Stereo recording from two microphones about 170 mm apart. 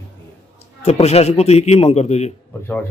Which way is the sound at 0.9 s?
40° left (ahead or behind).